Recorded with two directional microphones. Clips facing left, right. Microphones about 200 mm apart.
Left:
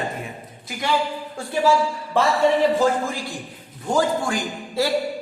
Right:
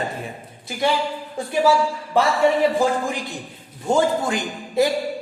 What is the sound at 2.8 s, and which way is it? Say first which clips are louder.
Speech: even; 20° right (ahead or behind).